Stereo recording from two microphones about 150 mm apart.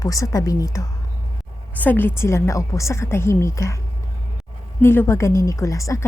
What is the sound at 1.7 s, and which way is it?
A woman's voice, 10° left (ahead or behind).